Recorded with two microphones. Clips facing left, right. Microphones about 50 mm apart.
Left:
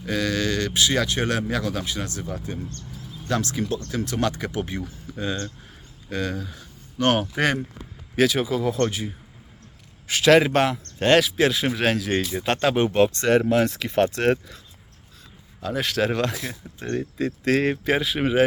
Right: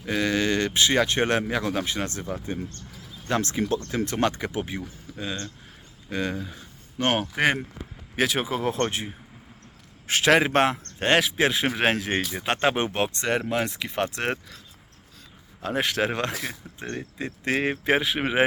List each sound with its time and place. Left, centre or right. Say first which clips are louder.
0.0 s speech: even; right
4.4 s speech: left 1 dB; centre
4.7 s speech: left 2 dB; centre
6.1 s speech: left 1 dB; centre
8.3 s a man's voice: left 2 dB; right
12.3 s speech: left 1 dB; centre
15.6 s speech: left 1 dB; right